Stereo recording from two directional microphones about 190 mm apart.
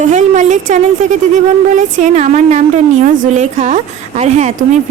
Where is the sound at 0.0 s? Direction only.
40° right (ahead or behind).